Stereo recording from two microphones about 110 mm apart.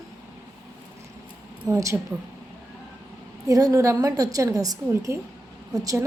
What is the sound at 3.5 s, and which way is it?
A woman's voice, 30° right (ahead or behind).